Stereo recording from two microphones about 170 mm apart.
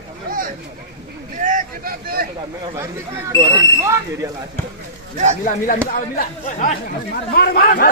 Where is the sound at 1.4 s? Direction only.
50° right (ahead or behind).